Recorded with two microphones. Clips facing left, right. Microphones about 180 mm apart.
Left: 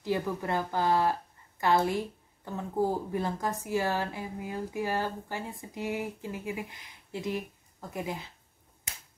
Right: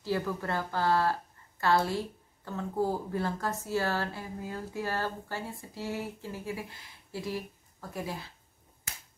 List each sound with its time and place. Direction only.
0.0 s speech: 15° left (ahead or behind)